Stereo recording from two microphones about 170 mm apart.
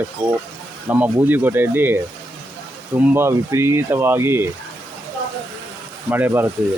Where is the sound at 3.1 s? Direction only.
15° right (ahead or behind).